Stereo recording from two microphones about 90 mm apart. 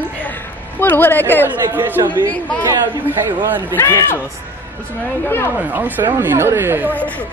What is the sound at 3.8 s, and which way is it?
Speech, 30° left (ahead or behind).